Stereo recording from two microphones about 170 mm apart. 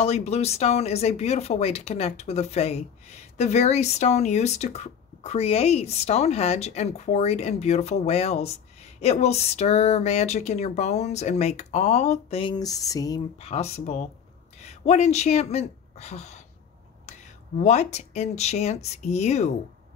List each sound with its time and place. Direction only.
0.0 s speech: 40° left (ahead or behind); by 13.2 s 20° left (ahead or behind)
13.4 s speech: 40° left (ahead or behind)
17.6 s speech: 40° left (ahead or behind)